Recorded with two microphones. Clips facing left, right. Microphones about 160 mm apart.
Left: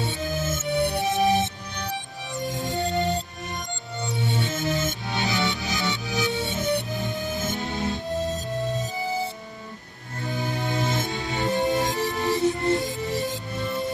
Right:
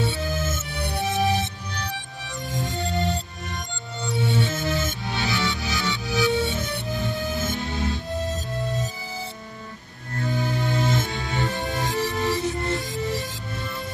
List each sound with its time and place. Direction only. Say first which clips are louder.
0.0 s music: right 2 dB; 20° left (ahead or behind)
10.2 s music: right 2 dB; 20° left (ahead or behind)